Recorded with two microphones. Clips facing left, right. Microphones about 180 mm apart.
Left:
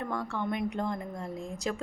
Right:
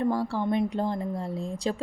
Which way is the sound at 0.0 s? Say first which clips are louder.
Right 7 dB; 30° right (ahead or behind).